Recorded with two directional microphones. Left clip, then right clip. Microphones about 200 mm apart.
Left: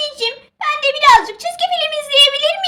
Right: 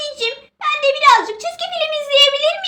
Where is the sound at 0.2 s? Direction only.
45° left (ahead or behind).